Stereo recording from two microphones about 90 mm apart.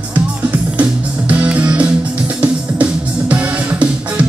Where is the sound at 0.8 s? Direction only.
15° right (ahead or behind).